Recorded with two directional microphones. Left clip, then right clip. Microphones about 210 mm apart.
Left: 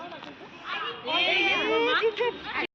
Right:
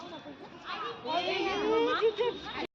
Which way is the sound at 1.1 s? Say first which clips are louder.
Left 8 dB; 30° right (ahead or behind).